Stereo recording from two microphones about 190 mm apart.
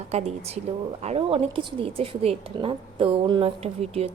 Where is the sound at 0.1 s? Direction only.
35° right (ahead or behind).